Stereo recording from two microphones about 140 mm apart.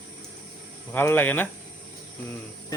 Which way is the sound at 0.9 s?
15° left (ahead or behind).